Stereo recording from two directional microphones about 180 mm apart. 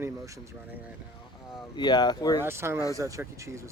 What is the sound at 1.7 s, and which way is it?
Speech, 25° left (ahead or behind).